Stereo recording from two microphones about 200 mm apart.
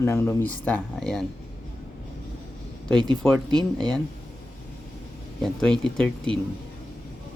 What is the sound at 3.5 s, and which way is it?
Speech, 20° right (ahead or behind).